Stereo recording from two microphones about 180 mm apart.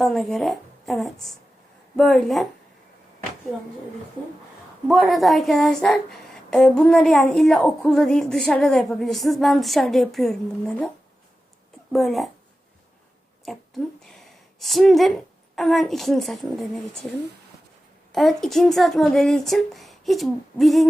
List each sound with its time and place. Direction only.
0.0 s a woman's voice: centre (ahead or behind)
4.9 s a woman's voice: centre (ahead or behind)
13.4 s a sound: centre (ahead or behind)
14.6 s a woman's voice: centre (ahead or behind)
18.1 s a woman's voice: centre (ahead or behind)